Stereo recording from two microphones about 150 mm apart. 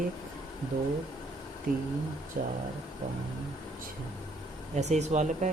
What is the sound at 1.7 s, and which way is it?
Speech, 75° right (ahead or behind).